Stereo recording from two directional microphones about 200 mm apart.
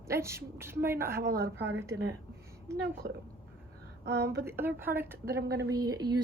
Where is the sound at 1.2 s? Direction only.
50° right (ahead or behind).